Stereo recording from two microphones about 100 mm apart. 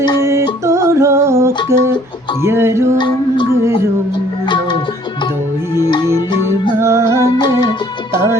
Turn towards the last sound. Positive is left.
turn(degrees=45)  # may be behind; listen again after turning